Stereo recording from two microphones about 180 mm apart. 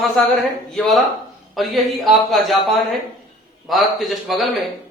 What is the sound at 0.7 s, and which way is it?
A man's voice, centre (ahead or behind).